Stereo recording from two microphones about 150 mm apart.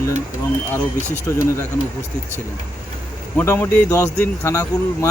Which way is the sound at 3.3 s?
15° left (ahead or behind).